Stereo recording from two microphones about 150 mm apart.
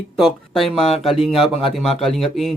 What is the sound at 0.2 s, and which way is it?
Speech, centre (ahead or behind).